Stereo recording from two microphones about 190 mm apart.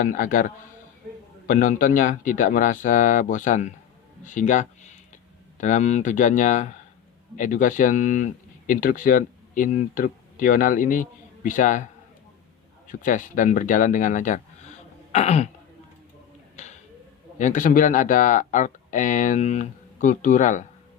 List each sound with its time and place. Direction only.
0.0 s speech: 45° left (ahead or behind)
12.9 s speech: 45° left (ahead or behind)
16.6 s a sound: 40° left (ahead or behind)
17.3 s speech: 40° left (ahead or behind)